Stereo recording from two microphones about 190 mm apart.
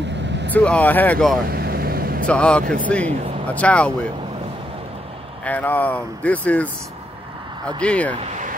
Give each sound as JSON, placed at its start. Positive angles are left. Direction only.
{"t": 0.5, "sound": "speech", "side_deg": 10}
{"t": 1.5, "sound": "vehicle", "side_deg": -55}
{"t": 2.2, "sound": "speech", "side_deg": 5}
{"t": 5.4, "sound": "speech", "side_deg": 10}
{"t": 7.8, "sound": "speech", "side_deg": 5}
{"t": 8.2, "sound": "a sound", "side_deg": -40}